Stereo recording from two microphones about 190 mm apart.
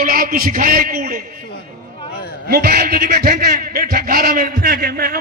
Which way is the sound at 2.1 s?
55° left (ahead or behind).